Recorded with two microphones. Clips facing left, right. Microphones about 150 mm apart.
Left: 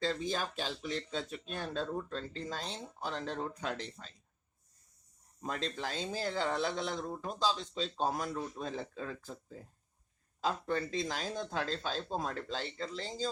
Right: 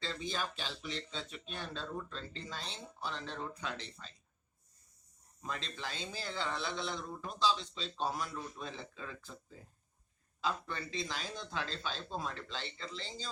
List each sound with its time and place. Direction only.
0.0 s speech: 45° left (ahead or behind)
5.4 s speech: 45° left (ahead or behind)